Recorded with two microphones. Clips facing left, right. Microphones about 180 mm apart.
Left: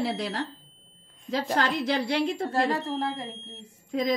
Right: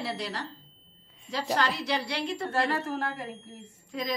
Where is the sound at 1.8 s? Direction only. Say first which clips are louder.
Left 5 dB; 55° left (ahead or behind).